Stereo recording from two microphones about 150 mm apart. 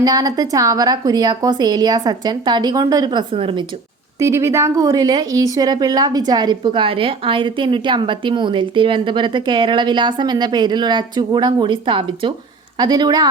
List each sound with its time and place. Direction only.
0.0 s a woman's voice: 25° right (ahead or behind)
4.2 s a woman's voice: 20° right (ahead or behind)